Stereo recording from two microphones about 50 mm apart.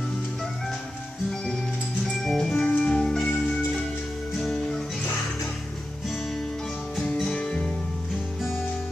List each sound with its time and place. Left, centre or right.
2.2 s music: centre
2.6 s music: centre
4.6 s music: centre
7.0 s music: centre
7.3 s music: centre